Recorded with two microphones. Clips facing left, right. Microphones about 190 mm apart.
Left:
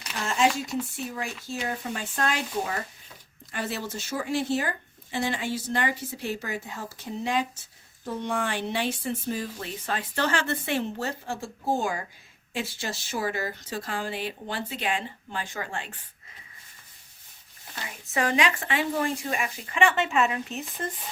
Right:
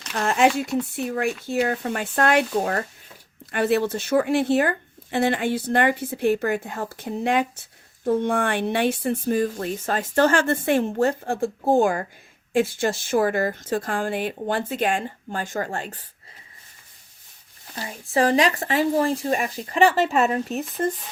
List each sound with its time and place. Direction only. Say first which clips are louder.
0.1 s a woman's voice: right 5 dB; 60° right (ahead or behind); by 16.0 s 40° right (ahead or behind)
17.7 s speech: right 7 dB; 35° right (ahead or behind)